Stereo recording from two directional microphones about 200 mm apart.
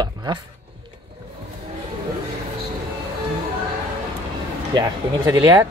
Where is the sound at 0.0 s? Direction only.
20° right (ahead or behind).